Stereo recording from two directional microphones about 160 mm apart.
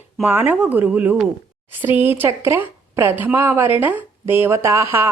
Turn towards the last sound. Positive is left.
turn(degrees=-15)  # may be behind; listen again after turning